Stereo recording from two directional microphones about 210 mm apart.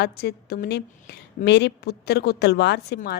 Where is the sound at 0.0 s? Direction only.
50° left (ahead or behind).